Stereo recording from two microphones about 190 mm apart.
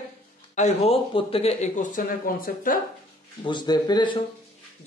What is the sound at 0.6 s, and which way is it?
Speech, 35° left (ahead or behind).